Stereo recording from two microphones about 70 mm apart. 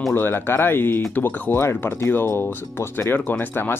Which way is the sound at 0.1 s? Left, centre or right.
Left.